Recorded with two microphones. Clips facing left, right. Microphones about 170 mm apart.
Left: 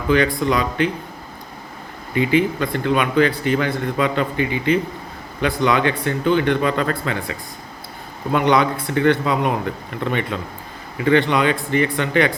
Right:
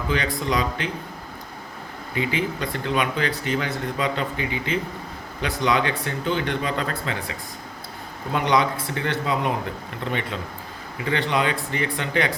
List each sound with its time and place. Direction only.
0.1 s a man's voice: 55° left (ahead or behind)
2.1 s a man's voice: 60° left (ahead or behind)
8.3 s a man's voice: 60° left (ahead or behind)
11.0 s a man's voice: 60° left (ahead or behind)